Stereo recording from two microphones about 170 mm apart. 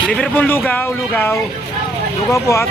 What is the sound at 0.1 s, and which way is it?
Speech, 5° left (ahead or behind).